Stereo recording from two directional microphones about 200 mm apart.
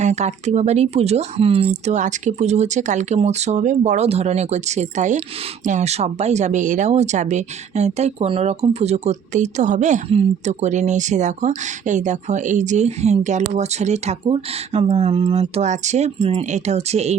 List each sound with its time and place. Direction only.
0.0 s speech: 35° right (ahead or behind)